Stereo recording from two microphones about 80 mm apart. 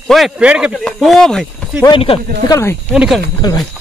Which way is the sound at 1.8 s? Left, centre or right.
Left.